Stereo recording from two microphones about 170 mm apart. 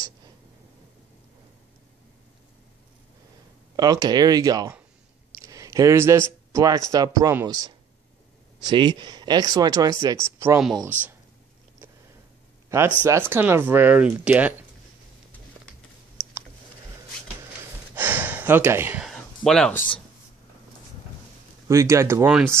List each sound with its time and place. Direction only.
3.7 s speech: 25° right (ahead or behind)
5.4 s a sound: 20° right (ahead or behind)
6.5 s speech: 20° right (ahead or behind)
12.6 s a sound: 15° right (ahead or behind)
13.0 s speech: 15° right (ahead or behind)
16.2 s clicking: 20° right (ahead or behind)
17.9 s gasp: 10° right (ahead or behind)
19.0 s a sound: centre (ahead or behind)
21.6 s speech: 15° right (ahead or behind)